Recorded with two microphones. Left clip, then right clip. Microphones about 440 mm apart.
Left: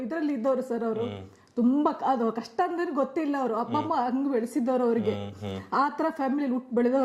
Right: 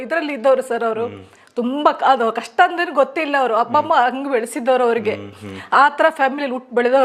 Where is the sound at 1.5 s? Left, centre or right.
Centre.